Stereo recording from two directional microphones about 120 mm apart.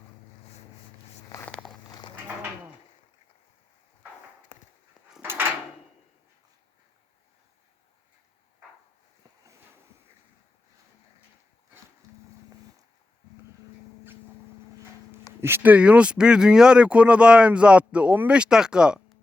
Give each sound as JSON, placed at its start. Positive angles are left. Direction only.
{"t": 1.9, "sound": "livestock", "side_deg": 40}
{"t": 5.2, "sound": "drawer open or close", "side_deg": -15}
{"t": 15.4, "sound": "speech", "side_deg": -20}